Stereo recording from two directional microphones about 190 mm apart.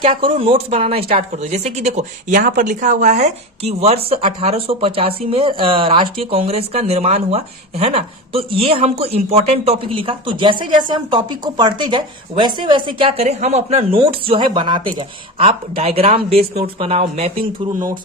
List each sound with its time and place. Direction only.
0.0 s a woman's voice: 30° right (ahead or behind)